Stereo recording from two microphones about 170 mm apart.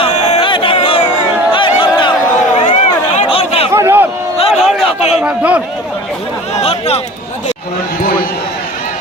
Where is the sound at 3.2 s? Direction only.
35° left (ahead or behind).